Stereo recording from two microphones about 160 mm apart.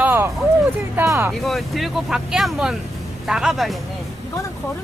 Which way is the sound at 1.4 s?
Centre (ahead or behind).